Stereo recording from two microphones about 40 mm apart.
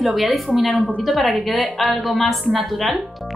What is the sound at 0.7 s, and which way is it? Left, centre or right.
Speech, right.